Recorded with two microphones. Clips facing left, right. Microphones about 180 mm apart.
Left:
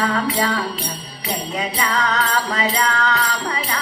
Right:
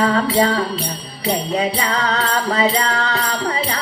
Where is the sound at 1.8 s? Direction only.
35° right (ahead or behind).